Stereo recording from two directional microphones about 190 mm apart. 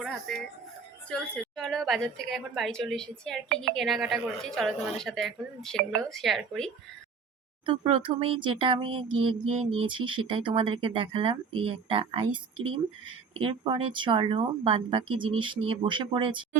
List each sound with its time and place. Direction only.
0.0 s a woman's voice: centre (ahead or behind)
7.6 s speech: 25° right (ahead or behind)